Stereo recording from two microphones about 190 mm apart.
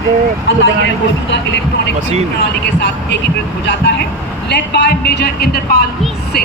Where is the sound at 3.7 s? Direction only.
70° left (ahead or behind).